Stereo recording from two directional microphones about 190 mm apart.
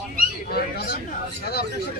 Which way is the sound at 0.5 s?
55° left (ahead or behind).